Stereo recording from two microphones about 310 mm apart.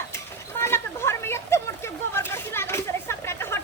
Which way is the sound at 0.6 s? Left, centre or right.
Centre.